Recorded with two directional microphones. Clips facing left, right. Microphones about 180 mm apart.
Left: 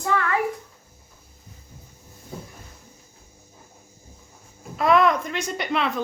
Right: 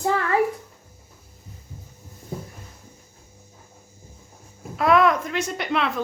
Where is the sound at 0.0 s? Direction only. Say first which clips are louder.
Right 1 dB; 30° right (ahead or behind).